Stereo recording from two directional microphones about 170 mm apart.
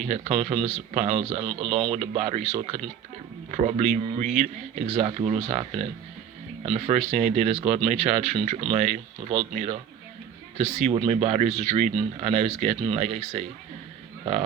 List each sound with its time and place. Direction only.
0.1 s speech: 40° right (ahead or behind)